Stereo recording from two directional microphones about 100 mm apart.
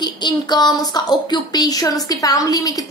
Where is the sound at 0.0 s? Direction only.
45° left (ahead or behind).